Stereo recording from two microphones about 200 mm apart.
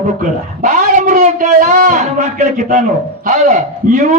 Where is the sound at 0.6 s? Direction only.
35° right (ahead or behind).